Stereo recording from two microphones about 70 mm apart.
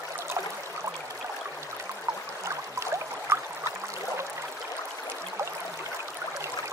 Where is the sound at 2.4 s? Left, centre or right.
Right.